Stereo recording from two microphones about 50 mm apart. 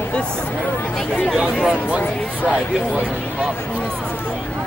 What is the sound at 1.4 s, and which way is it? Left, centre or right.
Speech, centre.